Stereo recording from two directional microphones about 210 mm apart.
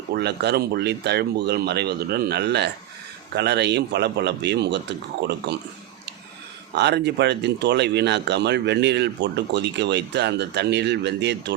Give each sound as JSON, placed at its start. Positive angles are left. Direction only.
{"t": 0.1, "sound": "speech", "side_deg": -55}
{"t": 6.7, "sound": "speech", "side_deg": -55}